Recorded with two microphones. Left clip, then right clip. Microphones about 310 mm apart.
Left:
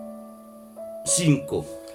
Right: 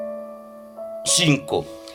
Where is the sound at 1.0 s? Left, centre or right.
Centre.